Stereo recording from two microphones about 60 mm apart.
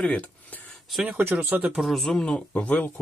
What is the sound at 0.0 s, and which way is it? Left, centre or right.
Speech, centre.